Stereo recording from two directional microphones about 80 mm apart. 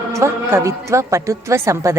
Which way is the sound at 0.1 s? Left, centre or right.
Right.